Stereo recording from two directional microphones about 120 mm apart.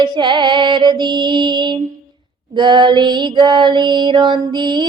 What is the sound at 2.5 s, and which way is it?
Music, 40° right (ahead or behind).